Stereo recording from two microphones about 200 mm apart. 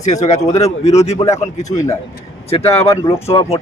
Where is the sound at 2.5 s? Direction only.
30° left (ahead or behind).